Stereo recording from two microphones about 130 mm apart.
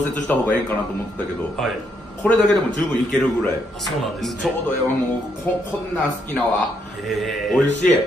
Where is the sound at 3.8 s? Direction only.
Centre (ahead or behind).